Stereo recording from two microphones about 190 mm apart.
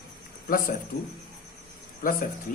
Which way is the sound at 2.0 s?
50° left (ahead or behind).